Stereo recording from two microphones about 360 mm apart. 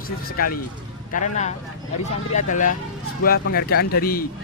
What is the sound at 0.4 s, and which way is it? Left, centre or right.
A man's voice, left.